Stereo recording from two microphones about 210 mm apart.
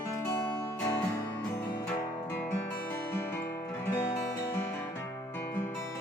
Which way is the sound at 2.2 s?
10° left (ahead or behind).